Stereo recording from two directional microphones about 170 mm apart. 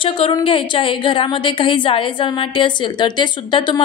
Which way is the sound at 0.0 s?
30° left (ahead or behind).